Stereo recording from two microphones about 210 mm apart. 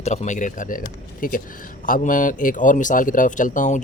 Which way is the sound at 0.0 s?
35° left (ahead or behind).